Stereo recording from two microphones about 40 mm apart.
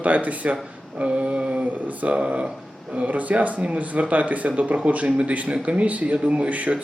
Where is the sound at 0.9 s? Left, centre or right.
Right.